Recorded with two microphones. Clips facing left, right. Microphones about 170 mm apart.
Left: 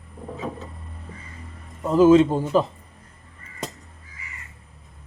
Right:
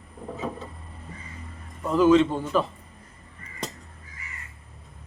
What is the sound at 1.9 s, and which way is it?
Speech, 40° left (ahead or behind).